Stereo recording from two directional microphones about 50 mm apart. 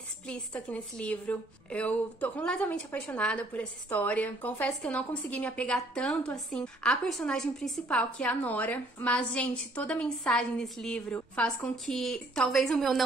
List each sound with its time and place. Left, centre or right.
0.3 s a woman's voice: left
2.4 s a woman's voice: centre
3.9 s a woman's voice: left; by 7.0 s centre
7.2 s a woman's voice: centre
7.9 s a woman's voice: left
8.5 s a woman's voice: left
11.7 s a woman's voice: centre